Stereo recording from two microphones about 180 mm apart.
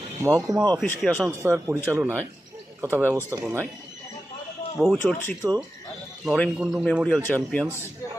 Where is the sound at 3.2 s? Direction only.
15° right (ahead or behind).